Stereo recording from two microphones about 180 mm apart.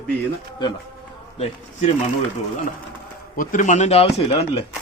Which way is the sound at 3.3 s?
45° left (ahead or behind).